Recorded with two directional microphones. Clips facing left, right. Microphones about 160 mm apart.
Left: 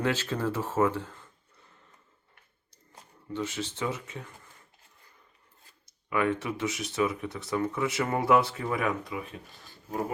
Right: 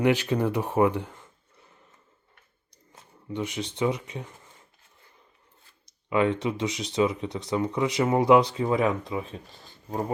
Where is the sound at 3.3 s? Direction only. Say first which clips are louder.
Right 2 dB; 15° right (ahead or behind).